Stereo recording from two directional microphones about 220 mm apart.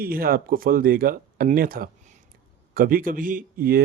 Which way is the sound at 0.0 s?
40° right (ahead or behind).